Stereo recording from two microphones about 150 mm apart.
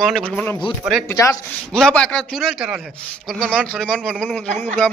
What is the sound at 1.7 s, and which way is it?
A man's voice, 5° left (ahead or behind).